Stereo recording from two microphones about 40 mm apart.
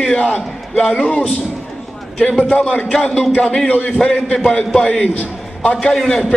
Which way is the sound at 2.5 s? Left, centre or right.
Left.